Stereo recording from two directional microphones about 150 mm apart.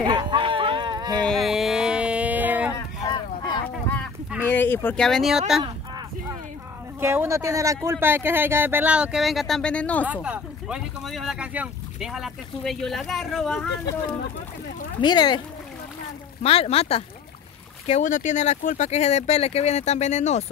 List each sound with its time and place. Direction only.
0.0 s a sound: 30° right (ahead or behind)
1.1 s a sound: 5° left (ahead or behind)
4.5 s speech: 15° left (ahead or behind)
7.0 s speech: 15° right (ahead or behind); by 10.0 s 10° left (ahead or behind)
10.0 s speech: 10° right (ahead or behind)
15.0 s speech: 30° left (ahead or behind)
16.4 s speech: 40° left (ahead or behind)
17.8 s speech: 55° left (ahead or behind)